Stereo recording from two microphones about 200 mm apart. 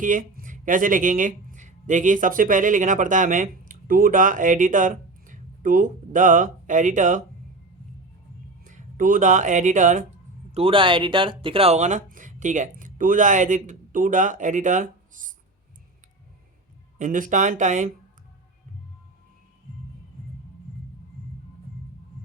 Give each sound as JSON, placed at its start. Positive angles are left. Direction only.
{"t": 0.0, "sound": "speech", "side_deg": -40}
{"t": 8.6, "sound": "speech", "side_deg": -40}
{"t": 10.5, "sound": "speech", "side_deg": -25}
{"t": 17.0, "sound": "speech", "side_deg": -40}